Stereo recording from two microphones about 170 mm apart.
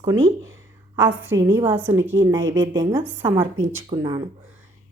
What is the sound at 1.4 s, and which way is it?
A woman's voice, 15° right (ahead or behind).